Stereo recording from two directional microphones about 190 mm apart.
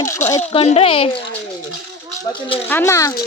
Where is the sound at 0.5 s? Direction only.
30° left (ahead or behind).